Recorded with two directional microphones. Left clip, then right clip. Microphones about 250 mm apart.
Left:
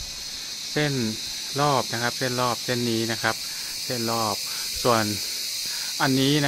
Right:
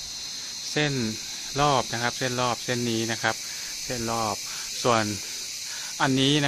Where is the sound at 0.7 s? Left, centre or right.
Centre.